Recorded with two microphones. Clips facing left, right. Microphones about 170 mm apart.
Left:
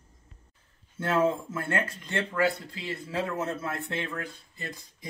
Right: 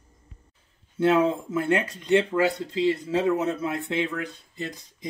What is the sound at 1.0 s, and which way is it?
Speech, 20° right (ahead or behind).